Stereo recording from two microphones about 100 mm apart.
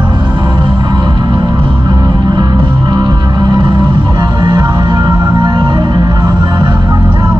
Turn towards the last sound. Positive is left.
turn(degrees=-50)  # may be behind; listen again after turning